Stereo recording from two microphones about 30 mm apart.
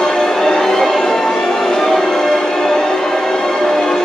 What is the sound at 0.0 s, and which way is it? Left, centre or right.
Music, centre.